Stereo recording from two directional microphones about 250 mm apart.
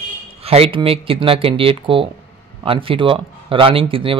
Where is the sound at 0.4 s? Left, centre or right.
Right.